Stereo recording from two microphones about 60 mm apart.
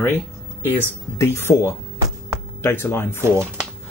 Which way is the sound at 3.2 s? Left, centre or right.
Right.